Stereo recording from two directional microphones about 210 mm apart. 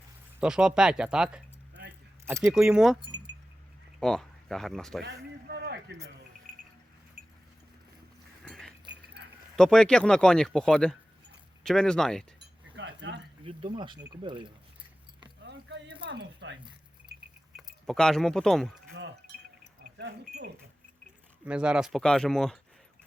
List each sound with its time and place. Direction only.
0.3 s speech: 5° right (ahead or behind)
4.0 s speech: centre (ahead or behind)
5.0 s speech: 50° right (ahead or behind)
8.4 s a sound: centre (ahead or behind)
9.6 s speech: 5° left (ahead or behind)
12.7 s cutlery: 55° right (ahead or behind)
13.4 s speech: 25° right (ahead or behind)
16.0 s speech: 60° right (ahead or behind)
17.8 s speech: 5° left (ahead or behind)
21.4 s speech: 5° right (ahead or behind)